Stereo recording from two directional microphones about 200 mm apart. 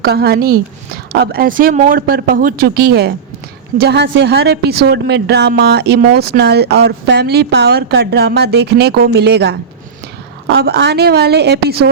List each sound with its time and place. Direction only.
0.0 s a woman's voice: 50° right (ahead or behind)